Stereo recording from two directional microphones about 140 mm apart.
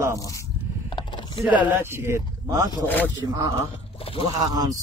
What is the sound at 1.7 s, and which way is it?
Speech, 15° right (ahead or behind).